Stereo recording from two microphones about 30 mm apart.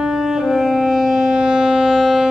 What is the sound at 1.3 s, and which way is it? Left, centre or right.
Civil defense siren, right.